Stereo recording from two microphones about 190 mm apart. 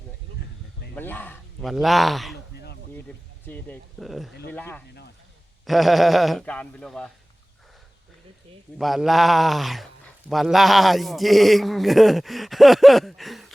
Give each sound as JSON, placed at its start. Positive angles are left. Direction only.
{"t": 0.9, "sound": "speech", "side_deg": 10}
{"t": 1.6, "sound": "a man's voice", "side_deg": 0}
{"t": 2.3, "sound": "a sound", "side_deg": 60}
{"t": 3.4, "sound": "a man's voice", "side_deg": 10}
{"t": 8.8, "sound": "a man's voice", "side_deg": 0}